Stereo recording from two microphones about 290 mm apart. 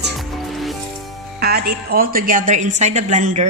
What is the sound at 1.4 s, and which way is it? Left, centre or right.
A woman's voice, right.